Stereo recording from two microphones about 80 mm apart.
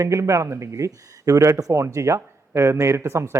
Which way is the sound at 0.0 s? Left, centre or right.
Right.